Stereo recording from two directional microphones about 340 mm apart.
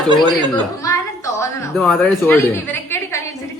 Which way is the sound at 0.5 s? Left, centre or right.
Centre.